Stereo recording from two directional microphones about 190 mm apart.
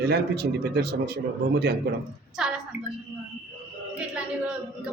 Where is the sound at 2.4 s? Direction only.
5° right (ahead or behind).